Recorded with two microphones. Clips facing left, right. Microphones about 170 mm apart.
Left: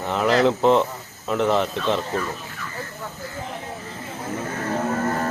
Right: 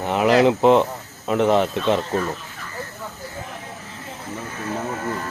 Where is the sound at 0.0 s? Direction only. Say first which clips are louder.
Right 3 dB; 10° right (ahead or behind).